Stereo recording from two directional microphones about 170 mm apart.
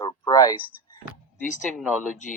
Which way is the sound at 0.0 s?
20° left (ahead or behind).